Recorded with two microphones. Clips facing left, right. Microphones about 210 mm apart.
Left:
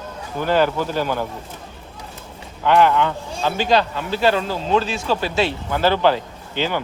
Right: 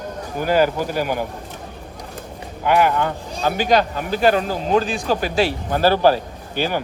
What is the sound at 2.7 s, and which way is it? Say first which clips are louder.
Speech: left 1 dB; 10° right (ahead or behind).